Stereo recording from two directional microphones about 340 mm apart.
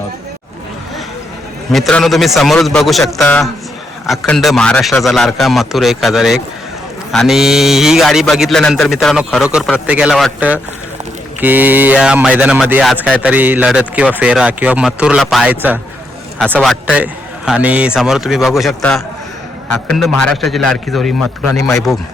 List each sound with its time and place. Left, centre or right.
1.7 s speech: centre